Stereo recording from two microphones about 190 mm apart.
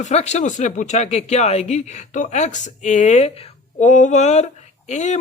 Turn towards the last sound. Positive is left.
turn(degrees=35)  # may be behind; listen again after turning